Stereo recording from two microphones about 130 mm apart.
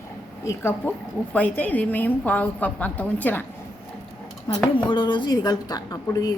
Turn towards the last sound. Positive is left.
turn(degrees=30)  # may be behind; listen again after turning